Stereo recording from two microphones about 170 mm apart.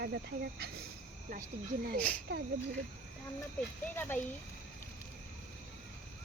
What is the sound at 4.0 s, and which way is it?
Speech, 10° left (ahead or behind).